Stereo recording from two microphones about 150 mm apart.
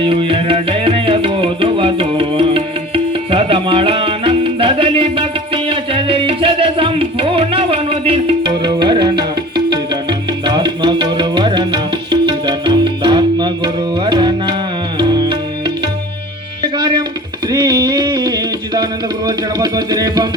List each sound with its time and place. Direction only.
0.0 s music: 35° right (ahead or behind)
16.7 s music: 30° right (ahead or behind)